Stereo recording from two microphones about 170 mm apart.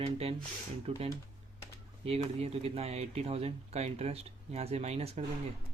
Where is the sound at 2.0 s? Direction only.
35° right (ahead or behind).